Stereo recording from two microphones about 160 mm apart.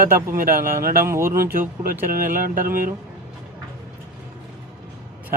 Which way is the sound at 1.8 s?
65° right (ahead or behind).